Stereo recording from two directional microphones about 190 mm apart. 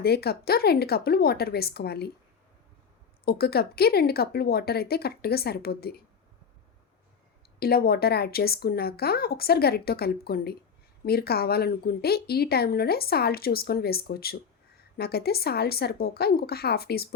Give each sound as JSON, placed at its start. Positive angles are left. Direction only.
{"t": 0.0, "sound": "speech", "side_deg": 55}
{"t": 3.2, "sound": "speech", "side_deg": 55}
{"t": 7.6, "sound": "speech", "side_deg": 55}